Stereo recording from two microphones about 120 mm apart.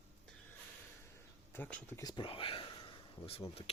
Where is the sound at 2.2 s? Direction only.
50° left (ahead or behind).